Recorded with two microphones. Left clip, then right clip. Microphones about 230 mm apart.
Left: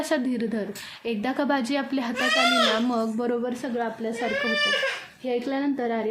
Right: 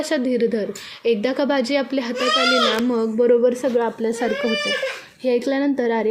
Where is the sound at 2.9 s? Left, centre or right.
Centre.